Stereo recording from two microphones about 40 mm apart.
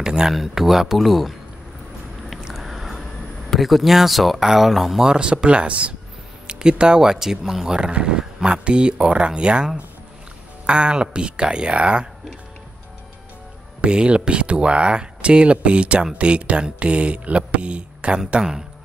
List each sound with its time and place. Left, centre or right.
0.0 s a sound: centre
0.3 s speech: centre
2.4 s boat: centre
3.5 s speech: centre
5.0 s speech: right
6.4 s speech: right
10.7 s speech: right
13.7 s speech: right